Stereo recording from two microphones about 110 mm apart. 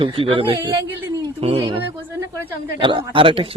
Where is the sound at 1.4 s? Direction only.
60° right (ahead or behind).